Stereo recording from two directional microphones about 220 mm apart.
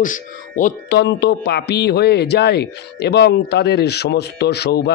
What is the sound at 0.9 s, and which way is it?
A man's voice, 50° left (ahead or behind).